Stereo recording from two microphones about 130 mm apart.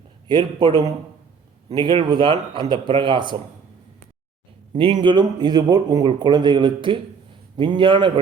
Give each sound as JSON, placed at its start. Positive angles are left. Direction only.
{"t": 0.3, "sound": "a man's voice", "side_deg": -35}
{"t": 4.7, "sound": "a man's voice", "side_deg": -40}